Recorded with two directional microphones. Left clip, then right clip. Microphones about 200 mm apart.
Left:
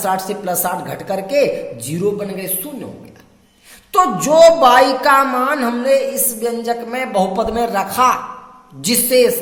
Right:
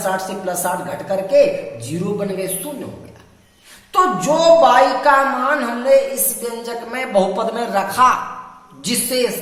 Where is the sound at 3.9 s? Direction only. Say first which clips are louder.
Left 3 dB; 45° left (ahead or behind).